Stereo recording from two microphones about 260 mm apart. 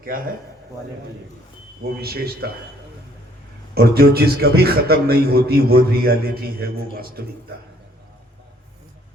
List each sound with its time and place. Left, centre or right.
0.1 s a man's voice: right
2.0 s a man's voice: right
3.8 s a man's voice: right